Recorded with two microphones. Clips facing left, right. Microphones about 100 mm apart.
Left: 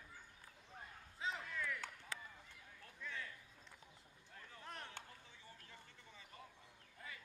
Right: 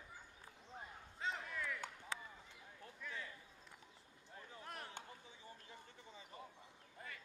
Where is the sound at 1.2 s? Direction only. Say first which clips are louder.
Right 1 dB; centre (ahead or behind).